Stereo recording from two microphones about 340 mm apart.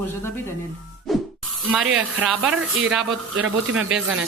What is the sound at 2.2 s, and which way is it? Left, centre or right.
Speech, centre.